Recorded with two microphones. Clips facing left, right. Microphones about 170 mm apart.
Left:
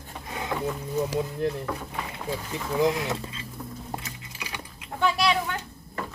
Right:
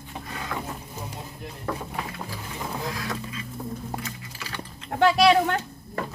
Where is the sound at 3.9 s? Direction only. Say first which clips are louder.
Right 2 dB; 20° left (ahead or behind).